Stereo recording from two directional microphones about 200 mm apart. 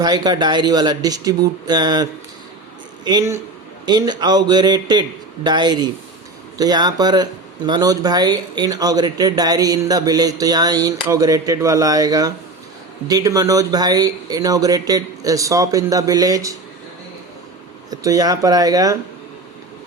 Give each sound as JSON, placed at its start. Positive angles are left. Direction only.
{"t": 0.0, "sound": "speech", "side_deg": -20}
{"t": 17.9, "sound": "speech", "side_deg": -20}